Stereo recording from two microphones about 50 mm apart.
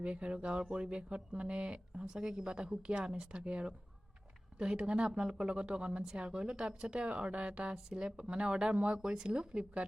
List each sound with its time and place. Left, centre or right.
0.0 s speech: right